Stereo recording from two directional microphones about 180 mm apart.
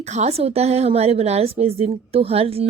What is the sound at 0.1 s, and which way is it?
A woman's voice, 35° right (ahead or behind).